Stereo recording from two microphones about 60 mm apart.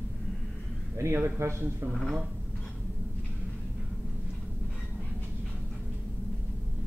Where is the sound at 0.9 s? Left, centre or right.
Right.